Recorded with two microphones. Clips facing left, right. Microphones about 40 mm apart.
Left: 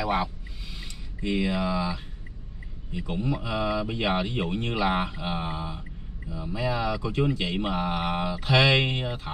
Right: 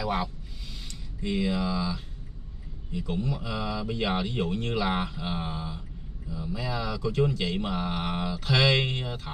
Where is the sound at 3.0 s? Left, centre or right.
Centre.